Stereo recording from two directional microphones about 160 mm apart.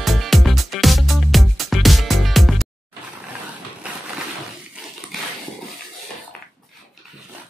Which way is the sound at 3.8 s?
10° right (ahead or behind).